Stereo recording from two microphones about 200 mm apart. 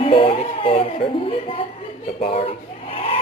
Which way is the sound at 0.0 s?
30° left (ahead or behind).